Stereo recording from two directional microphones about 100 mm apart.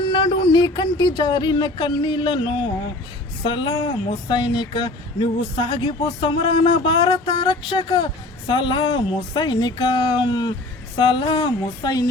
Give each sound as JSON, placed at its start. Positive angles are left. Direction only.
{"t": 0.1, "sound": "speech", "side_deg": 55}
{"t": 10.9, "sound": "speech", "side_deg": 55}